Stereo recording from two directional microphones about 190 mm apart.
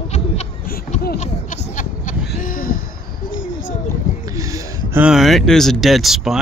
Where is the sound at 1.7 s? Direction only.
40° left (ahead or behind).